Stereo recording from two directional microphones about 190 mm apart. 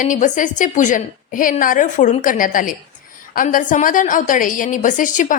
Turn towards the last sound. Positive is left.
turn(degrees=40)  # may be behind; listen again after turning